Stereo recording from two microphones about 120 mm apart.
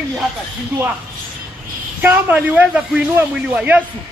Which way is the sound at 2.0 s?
15° right (ahead or behind).